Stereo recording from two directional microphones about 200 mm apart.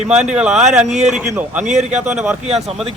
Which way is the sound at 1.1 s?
5° right (ahead or behind).